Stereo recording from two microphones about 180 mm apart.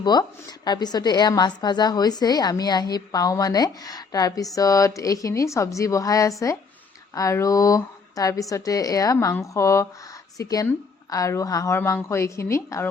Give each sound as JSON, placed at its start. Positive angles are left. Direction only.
{"t": 0.0, "sound": "a woman's voice", "side_deg": 25}